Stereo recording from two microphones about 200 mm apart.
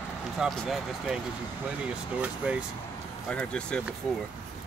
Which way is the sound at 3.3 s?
5° left (ahead or behind).